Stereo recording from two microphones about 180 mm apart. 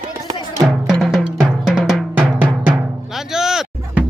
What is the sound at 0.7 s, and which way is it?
Drum, centre (ahead or behind).